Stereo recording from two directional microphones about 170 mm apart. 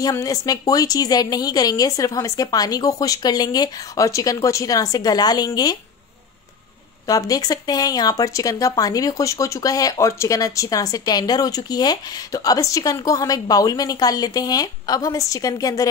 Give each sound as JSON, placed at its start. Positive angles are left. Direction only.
{"t": 0.0, "sound": "speech", "side_deg": 20}
{"t": 7.1, "sound": "speech", "side_deg": 20}